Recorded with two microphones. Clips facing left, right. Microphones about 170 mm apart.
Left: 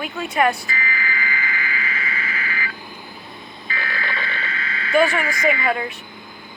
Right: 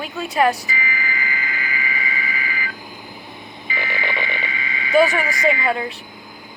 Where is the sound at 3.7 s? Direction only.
15° right (ahead or behind).